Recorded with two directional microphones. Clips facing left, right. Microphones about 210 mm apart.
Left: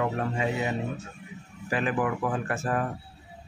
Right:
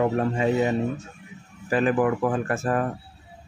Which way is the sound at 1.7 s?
45° right (ahead or behind).